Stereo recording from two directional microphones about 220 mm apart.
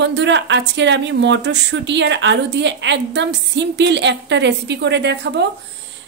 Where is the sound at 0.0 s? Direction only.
55° right (ahead or behind).